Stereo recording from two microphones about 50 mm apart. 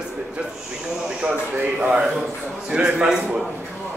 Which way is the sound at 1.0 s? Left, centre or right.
Right.